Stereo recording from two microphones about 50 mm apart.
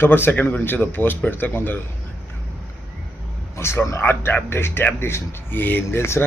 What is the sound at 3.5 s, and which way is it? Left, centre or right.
Speech, left.